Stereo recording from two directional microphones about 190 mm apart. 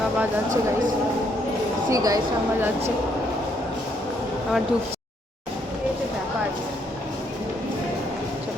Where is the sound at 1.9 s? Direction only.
20° right (ahead or behind).